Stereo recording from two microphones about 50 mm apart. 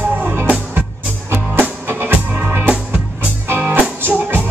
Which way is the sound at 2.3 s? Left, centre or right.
Right.